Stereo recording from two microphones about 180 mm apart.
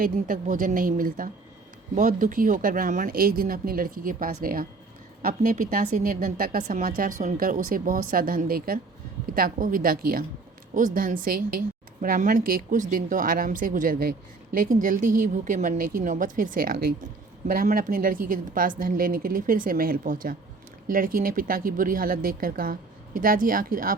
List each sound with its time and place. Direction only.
0.0 s speech: 50° right (ahead or behind)